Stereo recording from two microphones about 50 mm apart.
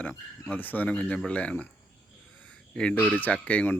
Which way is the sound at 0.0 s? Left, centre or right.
Left.